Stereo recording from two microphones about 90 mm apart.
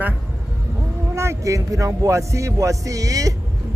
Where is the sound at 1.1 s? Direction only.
30° right (ahead or behind).